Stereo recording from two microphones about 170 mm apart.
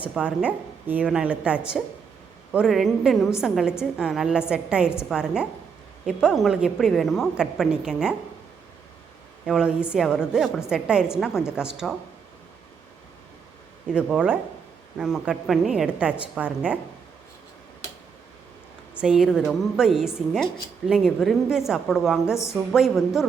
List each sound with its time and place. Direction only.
0.0 s a woman's voice: 5° right (ahead or behind)
9.5 s speech: 5° right (ahead or behind)
13.9 s a woman's voice: 5° right (ahead or behind)
18.9 s speech: 5° right (ahead or behind)